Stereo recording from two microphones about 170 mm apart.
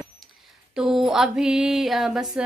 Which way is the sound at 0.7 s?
Centre (ahead or behind).